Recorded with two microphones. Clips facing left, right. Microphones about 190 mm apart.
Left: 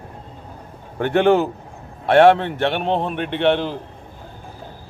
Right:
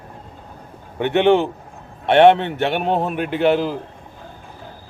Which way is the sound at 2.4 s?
Centre (ahead or behind).